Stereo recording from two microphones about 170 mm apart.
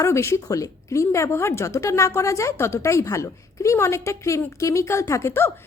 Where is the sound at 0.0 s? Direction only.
15° left (ahead or behind).